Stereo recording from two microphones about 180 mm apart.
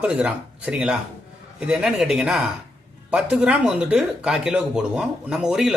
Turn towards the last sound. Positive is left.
turn(degrees=-5)  # may be behind; listen again after turning